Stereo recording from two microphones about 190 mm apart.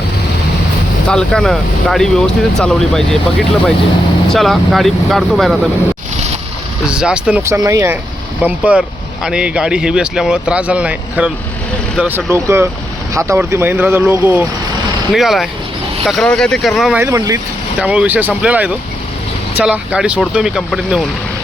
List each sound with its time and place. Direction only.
1.0 s speech: 5° left (ahead or behind)
6.8 s speech: 5° right (ahead or behind)
17.0 s speech: 15° right (ahead or behind)
17.7 s speech: 5° right (ahead or behind)